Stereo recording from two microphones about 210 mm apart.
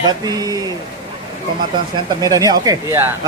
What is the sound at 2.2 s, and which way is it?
Speech, 15° right (ahead or behind).